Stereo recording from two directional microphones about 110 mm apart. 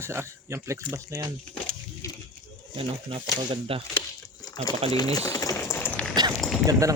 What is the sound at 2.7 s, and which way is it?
Speech, 60° right (ahead or behind).